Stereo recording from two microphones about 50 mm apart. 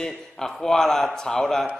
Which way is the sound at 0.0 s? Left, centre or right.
Centre.